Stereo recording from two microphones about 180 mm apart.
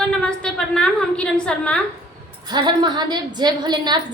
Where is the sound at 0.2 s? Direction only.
5° left (ahead or behind).